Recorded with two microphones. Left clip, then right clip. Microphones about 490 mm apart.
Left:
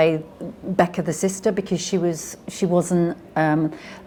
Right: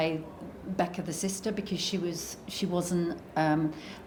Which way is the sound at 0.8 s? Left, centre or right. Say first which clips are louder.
Left 12 dB; left.